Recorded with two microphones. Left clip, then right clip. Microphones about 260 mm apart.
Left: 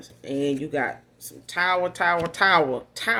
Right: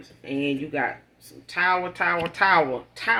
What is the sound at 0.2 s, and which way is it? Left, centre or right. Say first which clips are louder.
Speech: left 1 dB; left.